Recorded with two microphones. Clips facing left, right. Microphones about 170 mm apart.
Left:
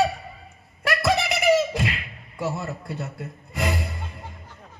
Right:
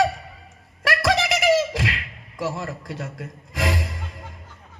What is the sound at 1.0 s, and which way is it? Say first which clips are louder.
Beatboxing: right 1 dB; 90° right.